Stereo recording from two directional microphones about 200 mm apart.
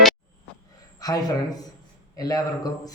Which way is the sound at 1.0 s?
20° left (ahead or behind).